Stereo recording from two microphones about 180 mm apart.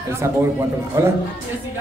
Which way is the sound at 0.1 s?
15° right (ahead or behind).